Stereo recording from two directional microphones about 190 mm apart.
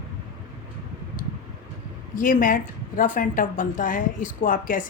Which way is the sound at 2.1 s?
45° left (ahead or behind).